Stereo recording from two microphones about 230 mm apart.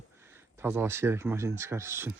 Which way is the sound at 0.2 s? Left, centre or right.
Centre.